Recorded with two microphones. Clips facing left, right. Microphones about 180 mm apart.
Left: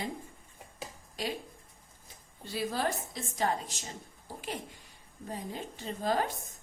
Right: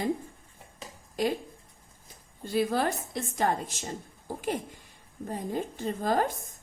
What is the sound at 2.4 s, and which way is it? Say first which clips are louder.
A woman's voice: right 6 dB; 50° right (ahead or behind).